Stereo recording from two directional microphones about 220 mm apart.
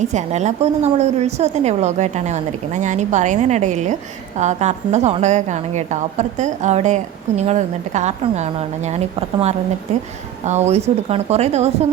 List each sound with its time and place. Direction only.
0.0 s a woman's voice: 30° right (ahead or behind)